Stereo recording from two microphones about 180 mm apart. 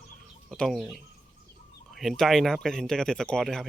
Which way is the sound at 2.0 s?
Centre (ahead or behind).